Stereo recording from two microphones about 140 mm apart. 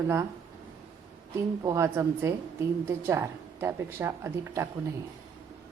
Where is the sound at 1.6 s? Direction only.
25° right (ahead or behind).